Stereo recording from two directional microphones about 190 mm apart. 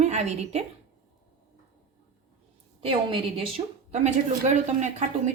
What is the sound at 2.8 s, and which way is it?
A woman's voice, 30° right (ahead or behind).